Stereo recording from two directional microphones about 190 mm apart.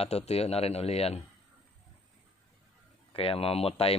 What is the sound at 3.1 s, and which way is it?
Speech, 30° left (ahead or behind).